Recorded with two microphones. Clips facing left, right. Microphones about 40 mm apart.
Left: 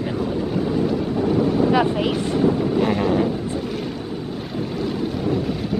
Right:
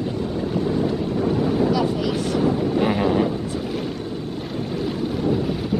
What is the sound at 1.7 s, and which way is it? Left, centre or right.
Speech, left.